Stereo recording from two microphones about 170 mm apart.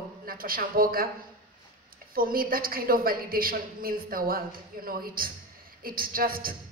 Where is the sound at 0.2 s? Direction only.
60° right (ahead or behind).